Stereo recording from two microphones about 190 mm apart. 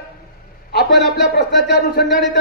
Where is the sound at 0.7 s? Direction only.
60° left (ahead or behind).